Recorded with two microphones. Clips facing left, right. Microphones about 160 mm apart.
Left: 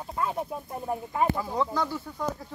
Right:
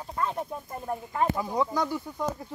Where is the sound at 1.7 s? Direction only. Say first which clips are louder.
Right 1 dB; 15° right (ahead or behind).